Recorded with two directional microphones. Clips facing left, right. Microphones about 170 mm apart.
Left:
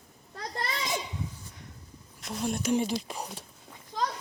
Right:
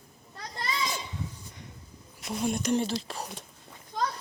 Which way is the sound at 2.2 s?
Centre (ahead or behind).